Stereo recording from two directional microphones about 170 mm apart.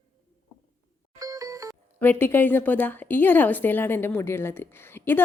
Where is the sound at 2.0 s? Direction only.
10° left (ahead or behind).